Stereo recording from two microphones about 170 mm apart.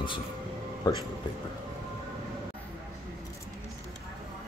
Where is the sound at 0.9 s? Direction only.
25° left (ahead or behind).